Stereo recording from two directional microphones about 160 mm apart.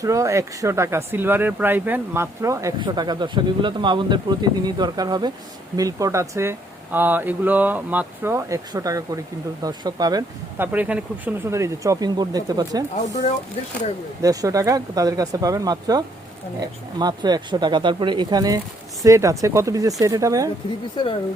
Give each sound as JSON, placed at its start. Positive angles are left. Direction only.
{"t": 0.0, "sound": "speech", "side_deg": -20}
{"t": 10.6, "sound": "speech", "side_deg": -10}
{"t": 14.2, "sound": "speech", "side_deg": -20}
{"t": 20.9, "sound": "speech", "side_deg": 30}